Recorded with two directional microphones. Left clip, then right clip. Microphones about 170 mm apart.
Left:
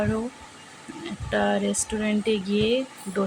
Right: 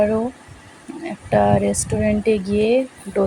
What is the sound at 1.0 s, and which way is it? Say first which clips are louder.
Speech: right 8 dB; 15° right (ahead or behind).